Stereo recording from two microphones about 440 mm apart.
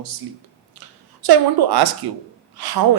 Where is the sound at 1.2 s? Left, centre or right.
Right.